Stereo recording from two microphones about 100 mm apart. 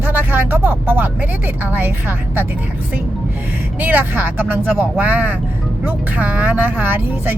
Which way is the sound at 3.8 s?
20° right (ahead or behind).